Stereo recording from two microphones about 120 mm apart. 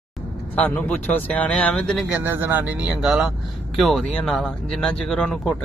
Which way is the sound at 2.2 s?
15° right (ahead or behind).